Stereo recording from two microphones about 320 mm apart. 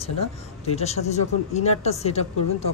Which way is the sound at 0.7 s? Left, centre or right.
Centre.